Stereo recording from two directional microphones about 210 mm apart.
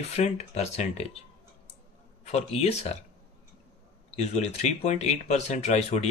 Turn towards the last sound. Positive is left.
turn(degrees=30)  # may be behind; listen again after turning